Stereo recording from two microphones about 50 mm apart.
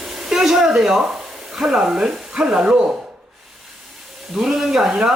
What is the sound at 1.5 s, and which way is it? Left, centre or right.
Speech, centre.